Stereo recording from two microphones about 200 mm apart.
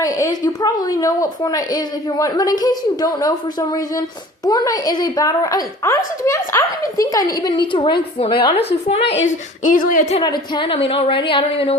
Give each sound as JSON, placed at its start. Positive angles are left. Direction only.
{"t": 0.0, "sound": "a woman's voice", "side_deg": 15}
{"t": 9.0, "sound": "a woman's voice", "side_deg": 65}
{"t": 9.6, "sound": "a woman's voice", "side_deg": 40}
{"t": 10.2, "sound": "a woman's voice", "side_deg": 20}